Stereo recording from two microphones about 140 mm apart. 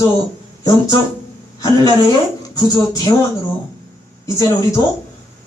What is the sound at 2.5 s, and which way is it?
Speech, 25° left (ahead or behind).